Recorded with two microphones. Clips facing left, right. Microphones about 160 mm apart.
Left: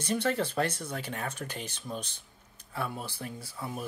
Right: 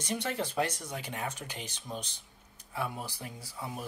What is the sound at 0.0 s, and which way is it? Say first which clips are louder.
Speech: left 5 dB; 15° right (ahead or behind).